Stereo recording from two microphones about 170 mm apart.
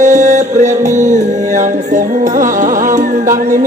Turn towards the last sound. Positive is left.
turn(degrees=-50)  # may be behind; listen again after turning